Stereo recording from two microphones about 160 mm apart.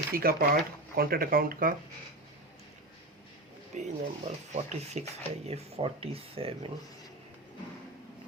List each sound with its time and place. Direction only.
0.1 s speech: 65° right (ahead or behind)
3.8 s speech: 45° right (ahead or behind)